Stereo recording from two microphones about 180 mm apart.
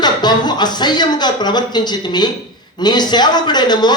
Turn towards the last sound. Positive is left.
turn(degrees=25)  # may be behind; listen again after turning